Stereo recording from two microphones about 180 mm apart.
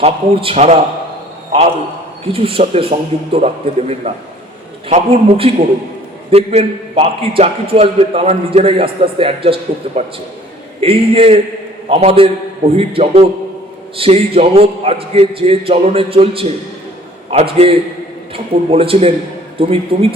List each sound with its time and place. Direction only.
0.0 s a man's voice: 35° right (ahead or behind)
2.2 s a man's voice: 30° right (ahead or behind)